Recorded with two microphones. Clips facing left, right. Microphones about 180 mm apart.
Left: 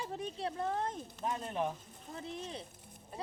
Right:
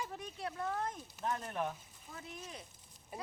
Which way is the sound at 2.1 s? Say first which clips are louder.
Left 6 dB; 30° left (ahead or behind).